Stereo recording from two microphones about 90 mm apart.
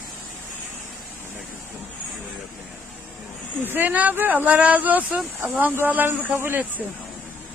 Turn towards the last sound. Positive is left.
turn(degrees=-25)  # may be behind; listen again after turning